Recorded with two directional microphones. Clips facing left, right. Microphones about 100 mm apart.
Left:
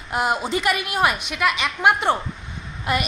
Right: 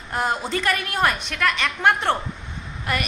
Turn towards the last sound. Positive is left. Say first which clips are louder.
# left 3 dB
turn(degrees=20)  # may be behind; listen again after turning